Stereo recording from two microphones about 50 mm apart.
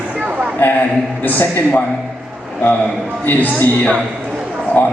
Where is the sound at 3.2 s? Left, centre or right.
Left.